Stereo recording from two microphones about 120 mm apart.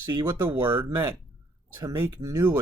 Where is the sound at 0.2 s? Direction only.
25° right (ahead or behind).